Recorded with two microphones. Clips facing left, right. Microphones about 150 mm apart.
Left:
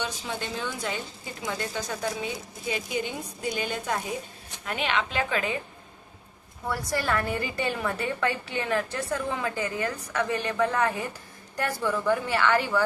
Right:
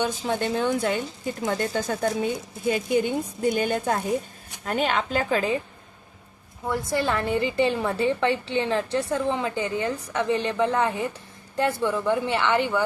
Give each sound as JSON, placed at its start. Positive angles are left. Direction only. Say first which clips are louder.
{"t": 0.0, "sound": "speech", "louder": "right 8 dB", "side_deg": -55}
{"t": 6.7, "sound": "a woman's voice", "louder": "right 3 dB", "side_deg": -25}